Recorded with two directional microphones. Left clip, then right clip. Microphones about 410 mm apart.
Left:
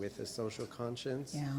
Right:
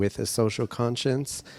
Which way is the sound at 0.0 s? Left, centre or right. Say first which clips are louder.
Right 14 dB; right.